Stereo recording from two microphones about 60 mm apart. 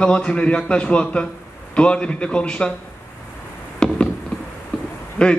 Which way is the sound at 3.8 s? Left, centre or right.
Centre.